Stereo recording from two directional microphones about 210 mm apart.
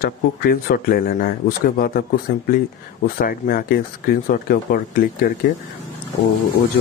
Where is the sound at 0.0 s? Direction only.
45° left (ahead or behind).